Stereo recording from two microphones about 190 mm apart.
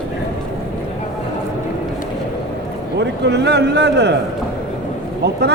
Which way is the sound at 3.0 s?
65° right (ahead or behind).